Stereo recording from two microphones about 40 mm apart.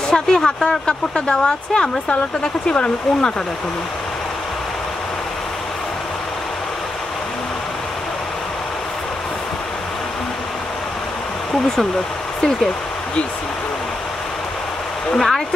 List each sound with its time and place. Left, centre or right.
0.1 s speech: centre
2.0 s speech: left
15.1 s speech: centre